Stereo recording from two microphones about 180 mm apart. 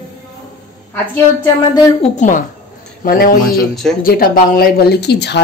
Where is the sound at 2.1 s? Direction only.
45° left (ahead or behind).